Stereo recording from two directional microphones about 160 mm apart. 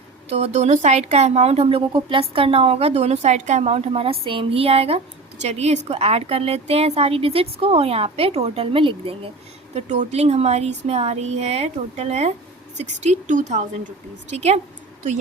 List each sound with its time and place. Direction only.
0.3 s speech: 40° right (ahead or behind)
9.7 s a woman's voice: 45° right (ahead or behind)